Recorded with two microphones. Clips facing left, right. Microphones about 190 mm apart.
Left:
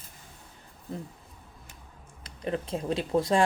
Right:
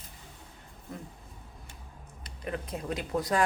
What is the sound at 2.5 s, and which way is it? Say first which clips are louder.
Speech: left 5 dB; 25° left (ahead or behind).